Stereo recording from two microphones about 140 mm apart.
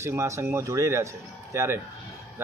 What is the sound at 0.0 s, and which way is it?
A man's voice, 20° right (ahead or behind).